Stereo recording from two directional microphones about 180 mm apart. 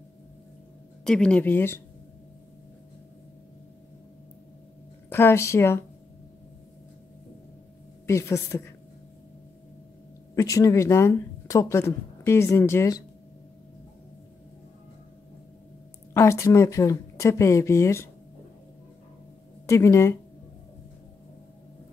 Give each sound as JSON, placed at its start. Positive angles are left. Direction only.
{"t": 1.0, "sound": "speech", "side_deg": 5}
{"t": 5.1, "sound": "speech", "side_deg": 15}
{"t": 8.1, "sound": "speech", "side_deg": 15}
{"t": 10.3, "sound": "speech", "side_deg": 20}
{"t": 16.1, "sound": "speech", "side_deg": 15}
{"t": 19.6, "sound": "speech", "side_deg": 15}